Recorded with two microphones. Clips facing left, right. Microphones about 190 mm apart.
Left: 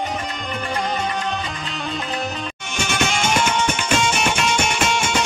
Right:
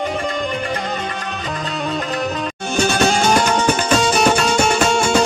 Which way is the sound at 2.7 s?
35° right (ahead or behind).